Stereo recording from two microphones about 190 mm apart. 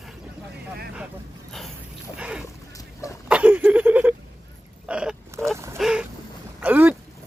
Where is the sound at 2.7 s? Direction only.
15° left (ahead or behind).